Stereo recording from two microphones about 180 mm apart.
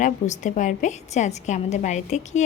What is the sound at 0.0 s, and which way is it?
A woman's voice, 40° left (ahead or behind).